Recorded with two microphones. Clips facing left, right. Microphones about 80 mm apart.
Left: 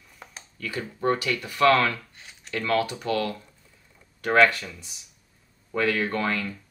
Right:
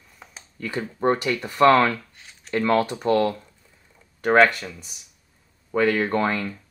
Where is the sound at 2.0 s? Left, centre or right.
Centre.